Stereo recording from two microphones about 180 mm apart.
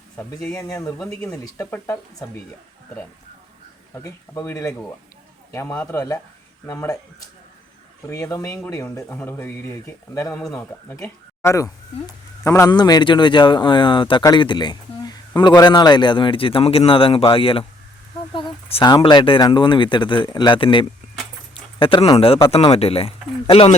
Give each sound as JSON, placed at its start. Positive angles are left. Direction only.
{"t": 0.2, "sound": "speech", "side_deg": 15}
{"t": 4.0, "sound": "speech", "side_deg": 15}
{"t": 8.0, "sound": "speech", "side_deg": 15}
{"t": 21.5, "sound": "a sound", "side_deg": 30}
{"t": 22.7, "sound": "speech", "side_deg": 35}